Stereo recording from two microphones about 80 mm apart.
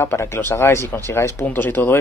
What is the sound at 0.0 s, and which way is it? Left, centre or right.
A man's voice, left.